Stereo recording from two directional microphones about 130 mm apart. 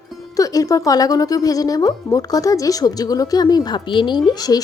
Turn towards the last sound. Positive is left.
turn(degrees=30)  # may be behind; listen again after turning